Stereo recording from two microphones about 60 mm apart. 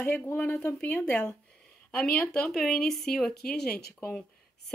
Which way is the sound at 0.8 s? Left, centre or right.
Left.